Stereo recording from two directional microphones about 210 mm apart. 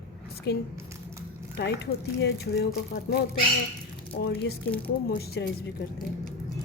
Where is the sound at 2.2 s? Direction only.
50° left (ahead or behind).